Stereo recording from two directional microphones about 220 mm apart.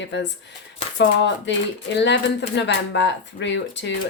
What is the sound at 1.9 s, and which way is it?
Speech, 50° left (ahead or behind).